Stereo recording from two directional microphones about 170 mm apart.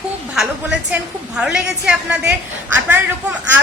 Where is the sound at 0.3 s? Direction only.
5° right (ahead or behind).